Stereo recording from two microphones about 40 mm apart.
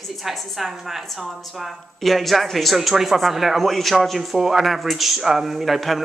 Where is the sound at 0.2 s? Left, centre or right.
Centre.